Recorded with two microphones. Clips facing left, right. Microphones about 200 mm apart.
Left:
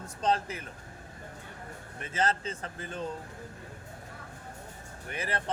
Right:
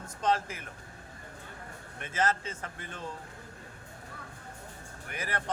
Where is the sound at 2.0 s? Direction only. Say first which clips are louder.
Even; 30° left (ahead or behind).